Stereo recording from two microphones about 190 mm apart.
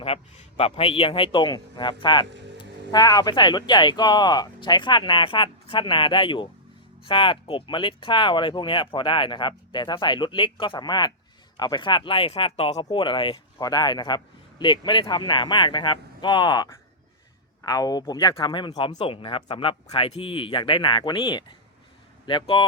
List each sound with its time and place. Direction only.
0.0 s a man's voice: 30° left (ahead or behind)